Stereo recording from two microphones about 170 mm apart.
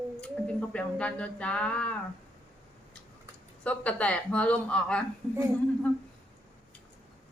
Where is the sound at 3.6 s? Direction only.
5° left (ahead or behind).